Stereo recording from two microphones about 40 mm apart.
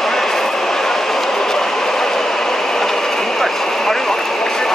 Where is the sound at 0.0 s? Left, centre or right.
Centre.